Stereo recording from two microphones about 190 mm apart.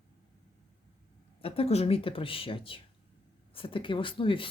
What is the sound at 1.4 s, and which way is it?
Speech, 30° left (ahead or behind).